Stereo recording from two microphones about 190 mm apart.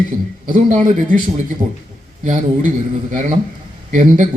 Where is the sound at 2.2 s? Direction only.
45° right (ahead or behind).